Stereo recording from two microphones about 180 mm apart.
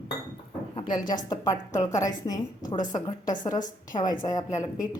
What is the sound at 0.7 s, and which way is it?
A woman's voice, 25° left (ahead or behind).